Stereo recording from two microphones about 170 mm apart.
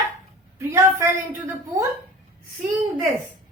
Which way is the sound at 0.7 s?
15° right (ahead or behind).